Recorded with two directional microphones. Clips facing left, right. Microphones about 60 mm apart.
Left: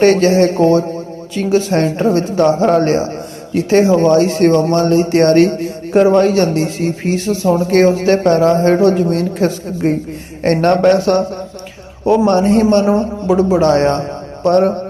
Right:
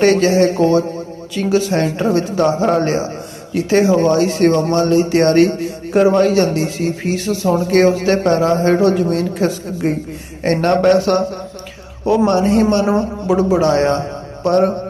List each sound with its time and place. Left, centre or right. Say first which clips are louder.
0.0 s speech: left 2 dB; left